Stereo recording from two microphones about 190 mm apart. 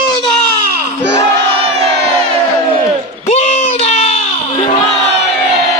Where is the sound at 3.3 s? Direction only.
35° left (ahead or behind).